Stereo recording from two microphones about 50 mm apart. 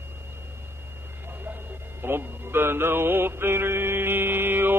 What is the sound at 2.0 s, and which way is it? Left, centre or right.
Mantra, right.